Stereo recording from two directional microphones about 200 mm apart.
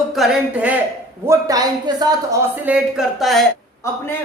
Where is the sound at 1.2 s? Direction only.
15° right (ahead or behind).